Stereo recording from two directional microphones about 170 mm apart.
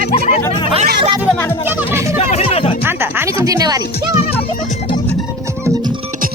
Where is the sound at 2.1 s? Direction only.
40° left (ahead or behind).